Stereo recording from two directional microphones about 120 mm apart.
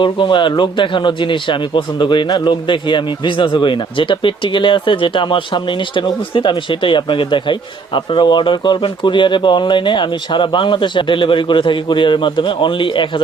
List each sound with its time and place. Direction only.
0.0 s speech: 40° left (ahead or behind)